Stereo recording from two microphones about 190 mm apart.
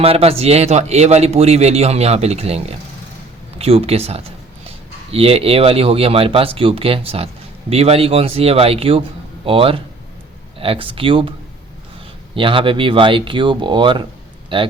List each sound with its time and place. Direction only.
0.0 s a man's voice: 30° right (ahead or behind)